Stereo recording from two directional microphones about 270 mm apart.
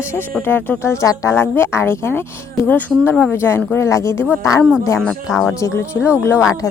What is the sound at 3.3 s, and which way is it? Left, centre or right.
Speech, centre.